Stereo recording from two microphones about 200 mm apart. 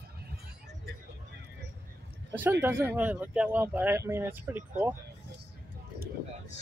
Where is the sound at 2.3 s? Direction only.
10° right (ahead or behind).